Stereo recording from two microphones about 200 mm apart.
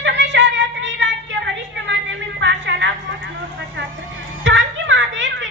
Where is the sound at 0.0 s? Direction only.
65° right (ahead or behind).